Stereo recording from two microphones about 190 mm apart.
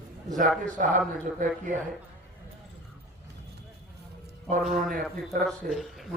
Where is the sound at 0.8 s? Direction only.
45° right (ahead or behind).